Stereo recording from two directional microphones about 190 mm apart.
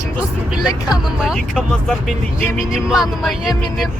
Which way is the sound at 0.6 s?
20° left (ahead or behind).